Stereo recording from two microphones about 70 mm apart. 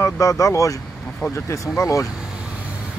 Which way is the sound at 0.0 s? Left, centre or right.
Left.